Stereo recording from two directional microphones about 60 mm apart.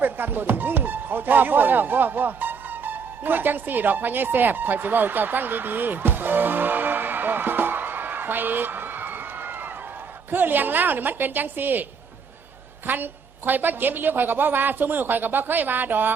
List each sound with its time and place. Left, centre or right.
0.0 s a woman's voice: right